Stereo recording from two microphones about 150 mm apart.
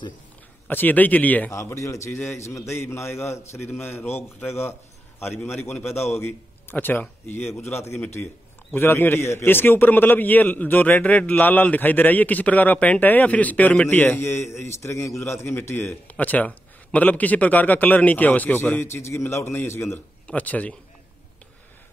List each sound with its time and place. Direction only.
0.7 s a man's voice: 10° left (ahead or behind)